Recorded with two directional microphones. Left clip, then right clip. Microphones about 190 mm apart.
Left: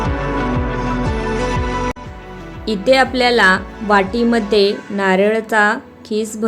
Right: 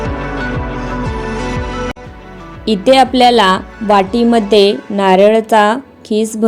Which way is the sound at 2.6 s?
20° right (ahead or behind).